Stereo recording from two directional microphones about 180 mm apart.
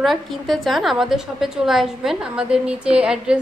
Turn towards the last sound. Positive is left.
turn(degrees=-5)  # may be behind; listen again after turning